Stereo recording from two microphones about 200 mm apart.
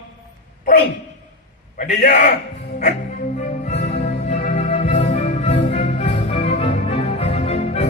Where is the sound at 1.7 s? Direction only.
40° left (ahead or behind).